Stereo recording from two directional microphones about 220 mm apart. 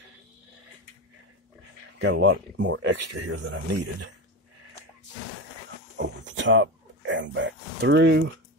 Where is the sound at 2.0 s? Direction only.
55° right (ahead or behind).